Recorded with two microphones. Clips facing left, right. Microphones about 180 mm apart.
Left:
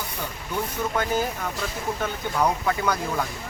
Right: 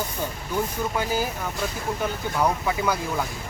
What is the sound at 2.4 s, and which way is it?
Speech, 10° right (ahead or behind).